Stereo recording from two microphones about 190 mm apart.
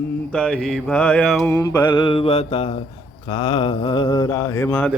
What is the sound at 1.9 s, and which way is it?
Mantra, 25° left (ahead or behind).